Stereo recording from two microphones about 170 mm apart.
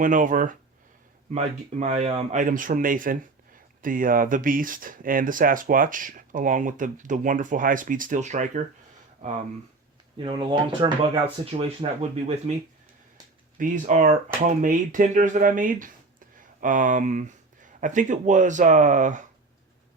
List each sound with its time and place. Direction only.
0.0 s speech: 50° right (ahead or behind)
1.8 s speech: 45° right (ahead or behind)
10.2 s speech: 30° right (ahead or behind)
13.6 s speech: 50° right (ahead or behind)